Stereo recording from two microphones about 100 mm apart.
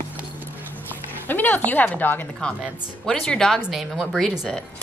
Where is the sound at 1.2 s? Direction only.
20° left (ahead or behind).